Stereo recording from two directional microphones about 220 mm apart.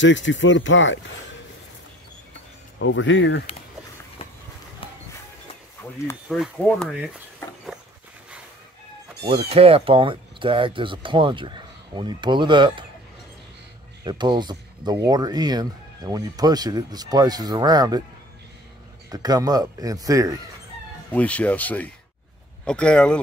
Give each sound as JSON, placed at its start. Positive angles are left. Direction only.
{"t": 0.0, "sound": "speech", "side_deg": 55}
{"t": 2.8, "sound": "speech", "side_deg": 60}
{"t": 4.2, "sound": "run", "side_deg": 25}
{"t": 6.2, "sound": "speech", "side_deg": -5}
{"t": 9.2, "sound": "speech", "side_deg": -25}
{"t": 14.0, "sound": "speech", "side_deg": -20}
{"t": 19.0, "sound": "speech", "side_deg": -15}
{"t": 21.1, "sound": "speech", "side_deg": 5}